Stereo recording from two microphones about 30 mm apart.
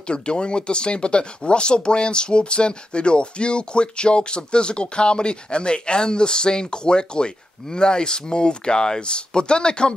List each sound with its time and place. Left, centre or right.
0.1 s speech: left